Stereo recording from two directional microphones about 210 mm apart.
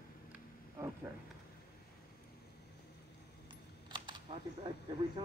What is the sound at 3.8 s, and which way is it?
Typing, 20° right (ahead or behind).